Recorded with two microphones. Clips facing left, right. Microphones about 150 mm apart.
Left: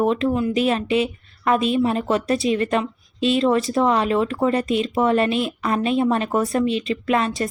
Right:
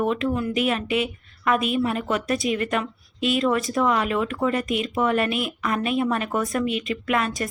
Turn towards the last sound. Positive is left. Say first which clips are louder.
# left 3 dB
turn(degrees=30)  # may be behind; listen again after turning